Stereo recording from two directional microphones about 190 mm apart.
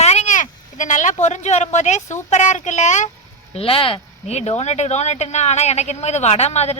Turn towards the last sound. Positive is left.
turn(degrees=35)  # may be behind; listen again after turning